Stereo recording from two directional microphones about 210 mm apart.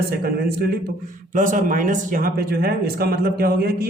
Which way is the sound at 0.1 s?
45° right (ahead or behind).